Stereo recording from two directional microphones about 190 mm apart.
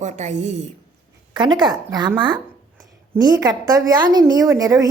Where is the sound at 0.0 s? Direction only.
40° right (ahead or behind).